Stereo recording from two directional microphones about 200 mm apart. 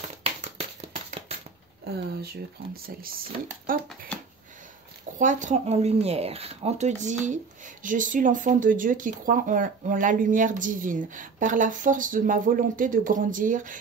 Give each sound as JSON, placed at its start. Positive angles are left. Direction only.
{"t": 0.2, "sound": "a sound", "side_deg": -30}
{"t": 1.9, "sound": "speech", "side_deg": -50}
{"t": 5.2, "sound": "speech", "side_deg": -40}